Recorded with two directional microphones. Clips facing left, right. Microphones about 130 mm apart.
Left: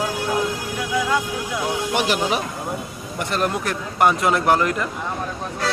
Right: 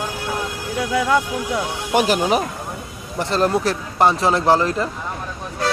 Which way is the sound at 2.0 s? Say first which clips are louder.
Right 6 dB; 40° right (ahead or behind).